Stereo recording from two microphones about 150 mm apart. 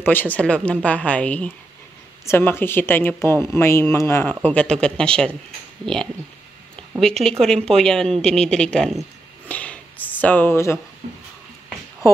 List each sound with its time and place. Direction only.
0.0 s speech: 10° left (ahead or behind)
7.0 s speech: 5° left (ahead or behind)
9.5 s a sound: 10° left (ahead or behind)